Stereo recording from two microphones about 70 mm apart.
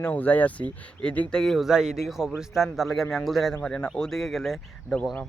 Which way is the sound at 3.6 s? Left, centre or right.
Centre.